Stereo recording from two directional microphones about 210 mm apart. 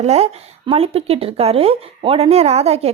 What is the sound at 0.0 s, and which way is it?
Speech, 30° right (ahead or behind).